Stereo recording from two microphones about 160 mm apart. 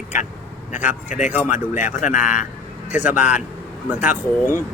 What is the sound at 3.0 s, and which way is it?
Speech, 5° right (ahead or behind).